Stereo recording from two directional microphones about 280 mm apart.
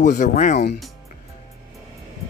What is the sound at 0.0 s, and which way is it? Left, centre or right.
Speech, left.